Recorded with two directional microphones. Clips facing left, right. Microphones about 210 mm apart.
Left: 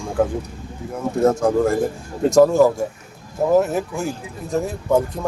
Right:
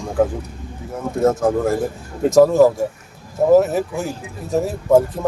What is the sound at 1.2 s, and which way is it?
Speech, centre (ahead or behind).